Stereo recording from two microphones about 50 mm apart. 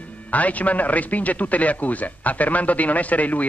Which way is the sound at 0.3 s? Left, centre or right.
Left.